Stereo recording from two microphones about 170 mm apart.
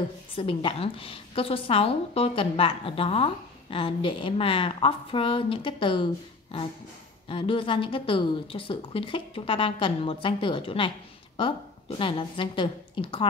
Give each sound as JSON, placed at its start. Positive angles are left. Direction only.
{"t": 0.4, "sound": "a woman's voice", "side_deg": 30}
{"t": 12.0, "sound": "a woman's voice", "side_deg": 30}